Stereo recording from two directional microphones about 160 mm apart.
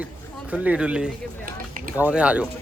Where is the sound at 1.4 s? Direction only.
60° right (ahead or behind).